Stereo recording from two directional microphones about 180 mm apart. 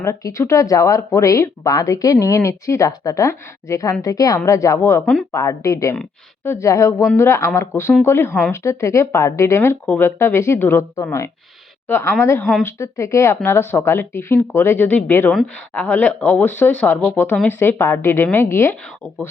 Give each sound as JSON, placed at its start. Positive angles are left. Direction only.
{"t": 0.0, "sound": "a woman's voice", "side_deg": 15}